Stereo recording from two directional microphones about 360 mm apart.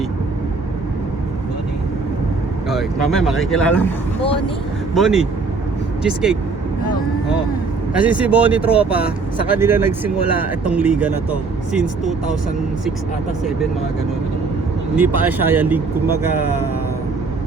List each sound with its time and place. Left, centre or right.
2.6 s speech: centre
4.2 s speech: centre
4.9 s speech: centre
7.9 s speech: centre
14.9 s speech: centre